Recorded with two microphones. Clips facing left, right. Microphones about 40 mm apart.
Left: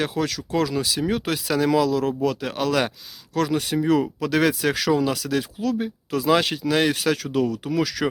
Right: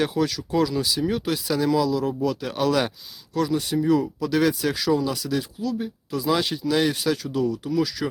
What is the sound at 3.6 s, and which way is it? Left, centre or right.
Speech, left.